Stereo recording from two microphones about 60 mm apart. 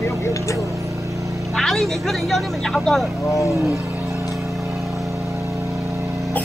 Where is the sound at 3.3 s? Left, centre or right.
Left.